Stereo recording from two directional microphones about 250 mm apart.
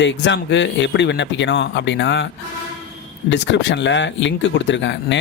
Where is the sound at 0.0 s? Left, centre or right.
Left.